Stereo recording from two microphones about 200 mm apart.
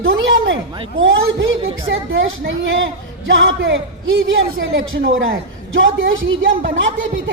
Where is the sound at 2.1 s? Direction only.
75° right (ahead or behind).